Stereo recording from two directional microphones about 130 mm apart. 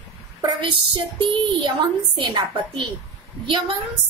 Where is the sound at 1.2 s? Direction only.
40° right (ahead or behind).